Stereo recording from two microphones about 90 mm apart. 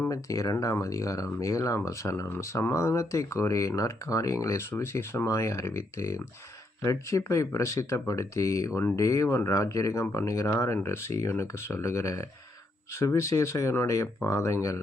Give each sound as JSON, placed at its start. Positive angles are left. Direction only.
{"t": 0.1, "sound": "speech", "side_deg": 40}